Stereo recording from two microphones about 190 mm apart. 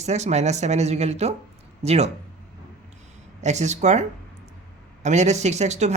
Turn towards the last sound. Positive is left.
turn(degrees=-35)  # may be behind; listen again after turning